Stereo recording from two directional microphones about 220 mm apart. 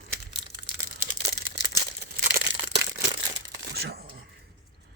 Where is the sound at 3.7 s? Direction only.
45° right (ahead or behind).